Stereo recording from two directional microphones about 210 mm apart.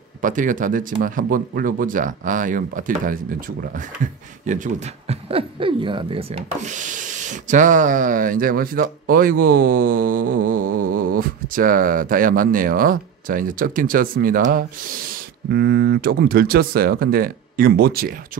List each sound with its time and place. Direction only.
0.2 s speech: 40° right (ahead or behind)